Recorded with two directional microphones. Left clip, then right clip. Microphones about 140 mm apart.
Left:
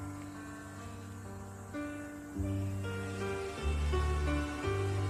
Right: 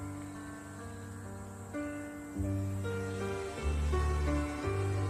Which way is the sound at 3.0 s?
5° right (ahead or behind).